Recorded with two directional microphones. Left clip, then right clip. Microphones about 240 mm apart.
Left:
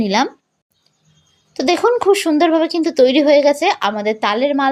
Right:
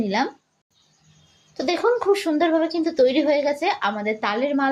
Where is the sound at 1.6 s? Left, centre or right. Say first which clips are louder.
Left 6 dB; left.